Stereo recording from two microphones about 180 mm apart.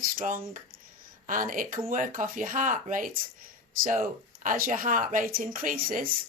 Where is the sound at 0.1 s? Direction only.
50° right (ahead or behind).